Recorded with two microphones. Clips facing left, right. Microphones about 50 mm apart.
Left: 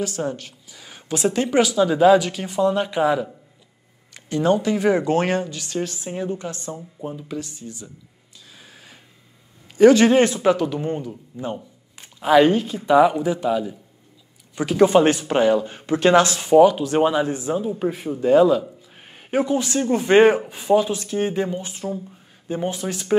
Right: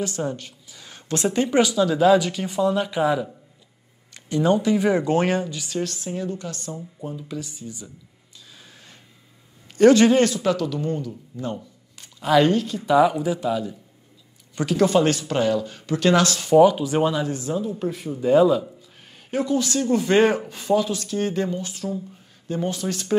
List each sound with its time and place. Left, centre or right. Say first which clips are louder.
0.0 s speech: left 1 dB; centre
5.8 s speech: left 1 dB; centre
7.3 s speech: left 1 dB; centre
8.5 s a sound: left 4 dB; centre
9.8 s speech: left 2 dB; centre
10.2 s speech: left 3 dB; left
14.9 s speech: left 3 dB; left
16.5 s speech: left 1 dB; centre
17.0 s speech: left 3 dB; left
18.2 s a man's voice: left 2 dB; centre
18.9 s speech: left 4 dB; left